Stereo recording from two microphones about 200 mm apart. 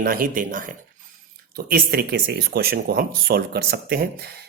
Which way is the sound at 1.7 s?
50° right (ahead or behind).